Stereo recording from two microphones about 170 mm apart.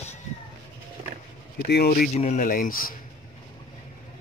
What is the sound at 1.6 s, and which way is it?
Speech, 70° left (ahead or behind).